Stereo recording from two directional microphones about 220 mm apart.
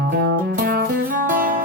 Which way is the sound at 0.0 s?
45° right (ahead or behind).